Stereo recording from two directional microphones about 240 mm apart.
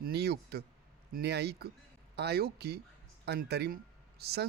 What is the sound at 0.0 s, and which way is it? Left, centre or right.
Speech, right.